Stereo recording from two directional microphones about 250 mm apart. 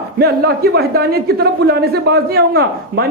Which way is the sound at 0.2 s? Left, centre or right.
Right.